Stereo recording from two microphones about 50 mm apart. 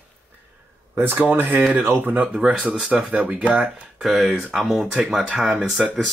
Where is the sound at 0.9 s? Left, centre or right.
Right.